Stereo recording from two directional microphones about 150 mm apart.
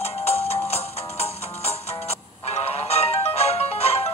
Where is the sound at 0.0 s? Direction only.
45° left (ahead or behind).